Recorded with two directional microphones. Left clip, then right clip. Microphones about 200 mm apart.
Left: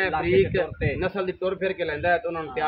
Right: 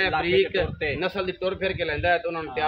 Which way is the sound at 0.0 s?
5° right (ahead or behind).